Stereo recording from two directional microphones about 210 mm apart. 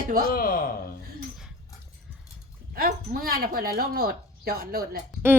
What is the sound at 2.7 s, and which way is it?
Speech, 45° right (ahead or behind).